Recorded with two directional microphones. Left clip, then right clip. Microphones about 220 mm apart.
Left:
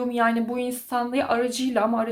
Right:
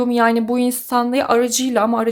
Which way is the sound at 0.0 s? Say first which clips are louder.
Right 7 dB; 50° right (ahead or behind).